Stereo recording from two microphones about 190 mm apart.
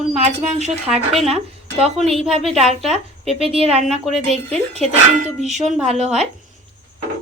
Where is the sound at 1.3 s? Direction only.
30° right (ahead or behind).